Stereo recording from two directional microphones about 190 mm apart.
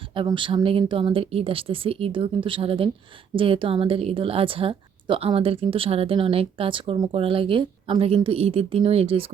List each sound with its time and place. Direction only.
0.1 s a woman's voice: 25° right (ahead or behind)